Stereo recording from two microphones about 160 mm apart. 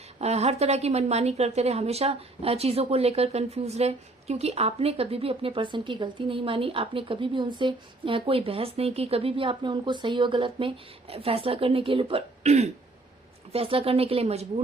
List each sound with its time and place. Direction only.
0.2 s a woman's voice: 40° right (ahead or behind)